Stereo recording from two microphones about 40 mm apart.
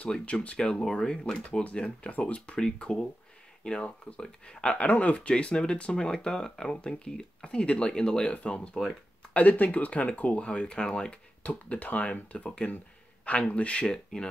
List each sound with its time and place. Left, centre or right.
0.1 s speech: left
0.6 s speech: centre
1.6 s speech: left
5.3 s speech: left
8.3 s speech: left
11.4 s speech: left
13.8 s speech: centre